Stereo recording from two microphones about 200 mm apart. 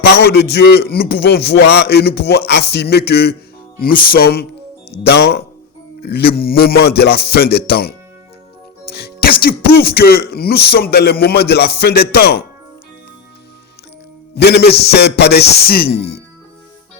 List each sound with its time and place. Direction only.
0.0 s a man's voice: 55° left (ahead or behind)
2.5 s a sound: 55° left (ahead or behind)
3.8 s a man's voice: 45° left (ahead or behind)
5.0 s a sound: 55° left (ahead or behind)
6.0 s a man's voice: 55° left (ahead or behind)
9.0 s music: 55° left (ahead or behind)
9.4 s a man's voice: 50° left (ahead or behind)
14.3 s a man's voice: 55° left (ahead or behind)